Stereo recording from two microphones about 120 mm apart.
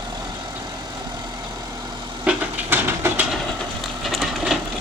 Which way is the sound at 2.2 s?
15° right (ahead or behind).